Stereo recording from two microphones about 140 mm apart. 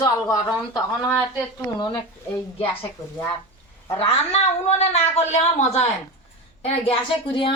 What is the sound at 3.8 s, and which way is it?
A woman's voice, 45° left (ahead or behind).